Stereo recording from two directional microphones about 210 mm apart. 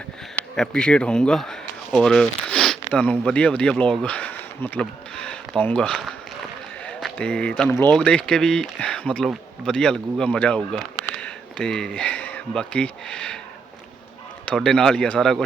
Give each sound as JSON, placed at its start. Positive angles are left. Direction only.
{"t": 0.5, "sound": "speech", "side_deg": 5}
{"t": 14.4, "sound": "speech", "side_deg": 5}